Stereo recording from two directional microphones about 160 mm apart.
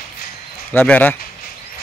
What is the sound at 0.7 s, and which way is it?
Speech, 10° left (ahead or behind).